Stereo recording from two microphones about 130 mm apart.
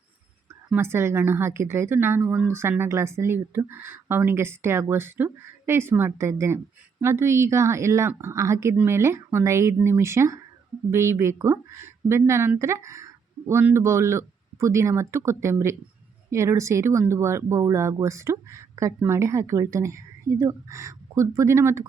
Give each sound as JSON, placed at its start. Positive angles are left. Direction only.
{"t": 0.8, "sound": "a woman's voice", "side_deg": -20}